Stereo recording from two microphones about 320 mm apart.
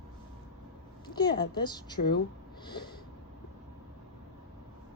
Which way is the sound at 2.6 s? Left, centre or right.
Centre.